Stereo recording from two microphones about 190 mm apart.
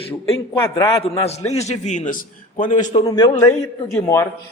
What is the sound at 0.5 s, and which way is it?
Speech, 15° left (ahead or behind).